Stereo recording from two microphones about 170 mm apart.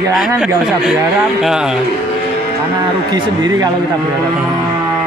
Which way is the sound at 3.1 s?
25° right (ahead or behind).